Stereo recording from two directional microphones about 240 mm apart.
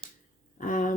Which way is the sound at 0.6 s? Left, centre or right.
Left.